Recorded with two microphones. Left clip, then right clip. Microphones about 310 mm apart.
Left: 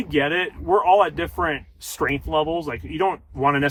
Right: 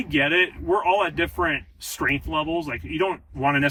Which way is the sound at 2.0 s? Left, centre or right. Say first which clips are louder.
Left 2 dB; centre.